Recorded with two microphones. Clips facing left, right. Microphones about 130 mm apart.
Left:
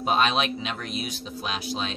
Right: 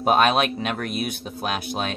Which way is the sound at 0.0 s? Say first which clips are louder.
Right 5 dB; 55° right (ahead or behind).